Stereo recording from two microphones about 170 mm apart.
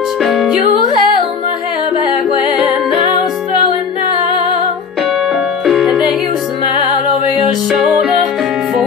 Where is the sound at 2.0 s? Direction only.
25° left (ahead or behind).